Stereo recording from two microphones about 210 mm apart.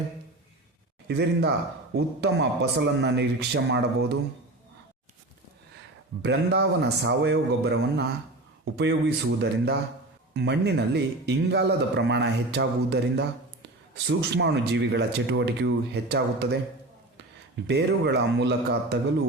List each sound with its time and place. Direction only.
1.0 s a man's voice: 55° right (ahead or behind)
6.2 s a man's voice: 55° right (ahead or behind)
17.7 s a man's voice: 50° right (ahead or behind)